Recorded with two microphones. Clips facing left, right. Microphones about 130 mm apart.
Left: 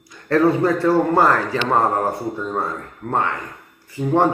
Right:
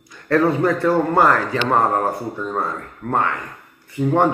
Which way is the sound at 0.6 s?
25° left (ahead or behind).